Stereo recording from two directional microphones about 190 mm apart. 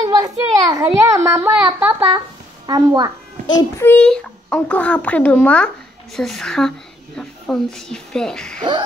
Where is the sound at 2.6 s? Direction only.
20° right (ahead or behind).